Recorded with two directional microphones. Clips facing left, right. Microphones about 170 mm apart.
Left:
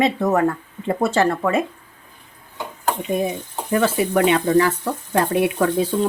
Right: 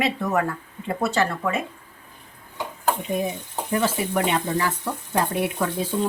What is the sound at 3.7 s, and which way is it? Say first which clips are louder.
Speech: left 5 dB; 75° left (ahead or behind).